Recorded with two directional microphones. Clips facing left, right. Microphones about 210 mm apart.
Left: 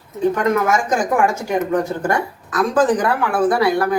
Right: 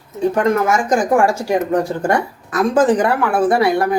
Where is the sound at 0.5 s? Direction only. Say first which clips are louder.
Right 2 dB; 30° right (ahead or behind).